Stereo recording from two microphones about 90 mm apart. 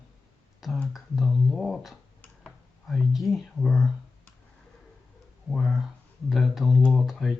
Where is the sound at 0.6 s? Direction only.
Centre (ahead or behind).